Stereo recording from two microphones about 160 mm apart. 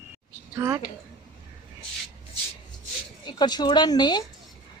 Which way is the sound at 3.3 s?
25° left (ahead or behind).